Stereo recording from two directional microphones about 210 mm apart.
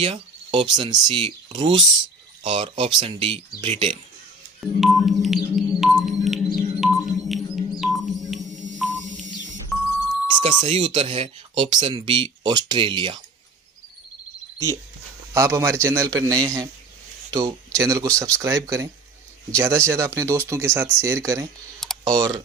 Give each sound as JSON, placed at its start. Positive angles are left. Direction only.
{"t": 0.0, "sound": "speech", "side_deg": -25}
{"t": 4.6, "sound": "chirp tone", "side_deg": 0}
{"t": 6.6, "sound": "a sound", "side_deg": 0}
{"t": 10.6, "sound": "speech", "side_deg": -25}
{"t": 15.3, "sound": "speech", "side_deg": -10}